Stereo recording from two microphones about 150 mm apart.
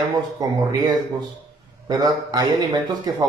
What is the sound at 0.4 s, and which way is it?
A man's voice, 25° right (ahead or behind).